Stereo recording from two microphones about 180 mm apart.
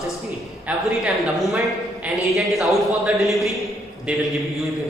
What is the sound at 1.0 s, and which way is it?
A woman's voice, centre (ahead or behind).